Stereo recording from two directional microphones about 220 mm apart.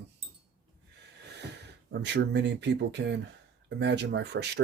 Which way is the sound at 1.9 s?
50° right (ahead or behind).